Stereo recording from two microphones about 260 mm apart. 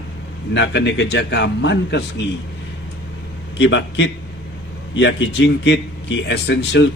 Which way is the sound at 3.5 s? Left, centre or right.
Left.